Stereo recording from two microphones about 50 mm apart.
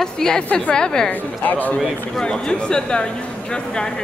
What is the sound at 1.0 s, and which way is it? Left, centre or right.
Speech, left.